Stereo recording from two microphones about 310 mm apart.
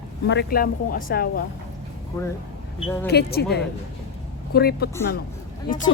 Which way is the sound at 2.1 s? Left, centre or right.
Centre.